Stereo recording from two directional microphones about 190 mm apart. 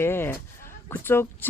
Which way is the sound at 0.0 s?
10° left (ahead or behind).